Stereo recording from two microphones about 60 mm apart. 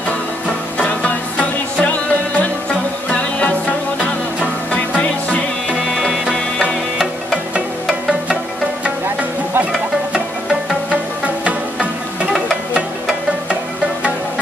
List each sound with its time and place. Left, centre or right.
0.5 s music: centre
6.2 s music: centre
9.7 s music: centre